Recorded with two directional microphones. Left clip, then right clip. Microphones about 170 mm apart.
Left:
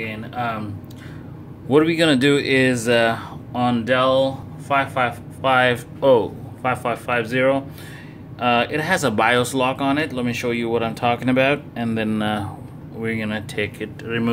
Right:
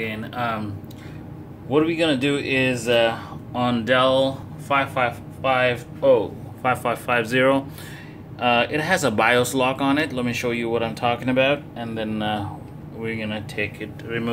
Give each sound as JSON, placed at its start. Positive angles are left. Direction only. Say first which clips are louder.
{"t": 0.0, "sound": "speech", "louder": "even", "side_deg": -10}
{"t": 1.7, "sound": "speech", "louder": "left 4 dB", "side_deg": 40}
{"t": 3.5, "sound": "speech", "louder": "left 1 dB", "side_deg": 5}
{"t": 4.7, "sound": "speech", "louder": "left 1 dB", "side_deg": 20}
{"t": 5.4, "sound": "speech", "louder": "left 3 dB", "side_deg": 35}
{"t": 6.6, "sound": "speech", "louder": "even", "side_deg": 0}
{"t": 8.4, "sound": "speech", "louder": "left 1 dB", "side_deg": 10}